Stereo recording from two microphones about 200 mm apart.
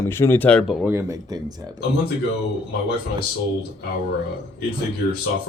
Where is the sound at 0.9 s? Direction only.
20° right (ahead or behind).